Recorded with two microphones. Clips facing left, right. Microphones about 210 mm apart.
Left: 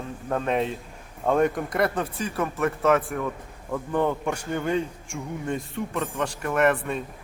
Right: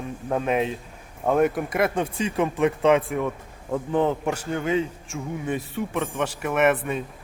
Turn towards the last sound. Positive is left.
turn(degrees=0)  # may be behind; listen again after turning